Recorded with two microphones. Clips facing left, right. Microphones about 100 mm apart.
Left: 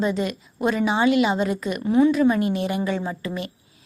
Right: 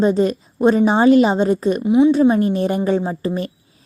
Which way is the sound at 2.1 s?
35° right (ahead or behind).